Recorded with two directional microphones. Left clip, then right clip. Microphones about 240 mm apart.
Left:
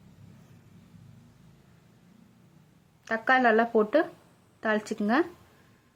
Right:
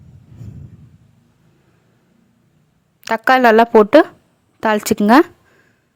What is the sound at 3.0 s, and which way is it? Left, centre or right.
Speech, right.